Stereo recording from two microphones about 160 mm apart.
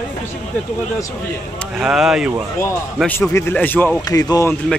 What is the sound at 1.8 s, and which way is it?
Speech, 5° right (ahead or behind).